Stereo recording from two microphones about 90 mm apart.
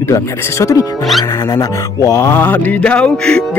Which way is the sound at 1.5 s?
40° left (ahead or behind).